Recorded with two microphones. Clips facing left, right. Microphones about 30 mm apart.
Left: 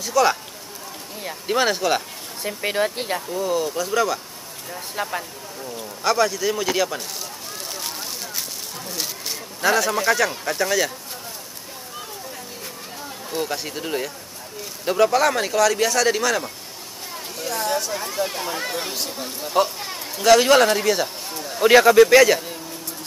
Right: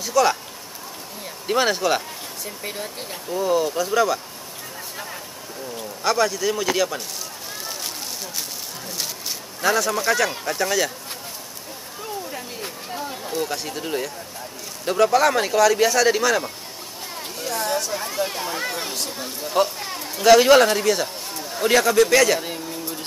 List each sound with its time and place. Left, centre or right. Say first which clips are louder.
0.0 s speech: even; centre
1.5 s speech: even; centre
2.4 s speech: left 10 dB; left
3.3 s speech: right 5 dB; centre
5.8 s speech: left 1 dB; centre
8.8 s a sound: left 1 dB; centre
9.6 s speech: left 1 dB; centre
12.3 s a sound: right 3 dB; centre
13.3 s speech: left 1 dB; centre
21.6 s speech: left 5 dB; centre